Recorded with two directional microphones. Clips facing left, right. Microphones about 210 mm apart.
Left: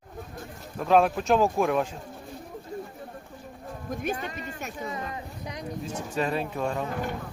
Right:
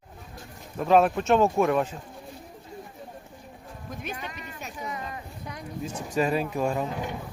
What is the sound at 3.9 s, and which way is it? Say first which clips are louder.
Speech: left 6 dB; 45° left (ahead or behind).